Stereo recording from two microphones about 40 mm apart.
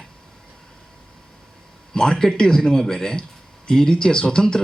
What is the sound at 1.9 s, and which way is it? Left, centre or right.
A man's voice, centre.